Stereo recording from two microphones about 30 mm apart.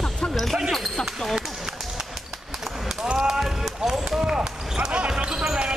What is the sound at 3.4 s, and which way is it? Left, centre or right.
Run, centre.